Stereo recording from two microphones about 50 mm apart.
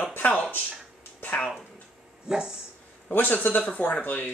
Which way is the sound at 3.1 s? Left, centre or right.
Left.